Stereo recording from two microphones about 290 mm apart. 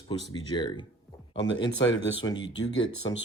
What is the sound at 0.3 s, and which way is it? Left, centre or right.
Speech, centre.